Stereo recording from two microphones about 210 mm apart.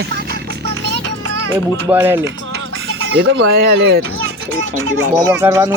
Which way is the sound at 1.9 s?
10° right (ahead or behind).